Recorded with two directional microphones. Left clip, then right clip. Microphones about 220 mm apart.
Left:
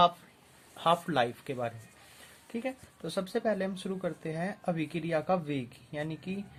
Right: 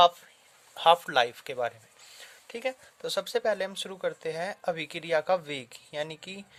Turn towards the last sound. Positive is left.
turn(degrees=-50)  # may be behind; listen again after turning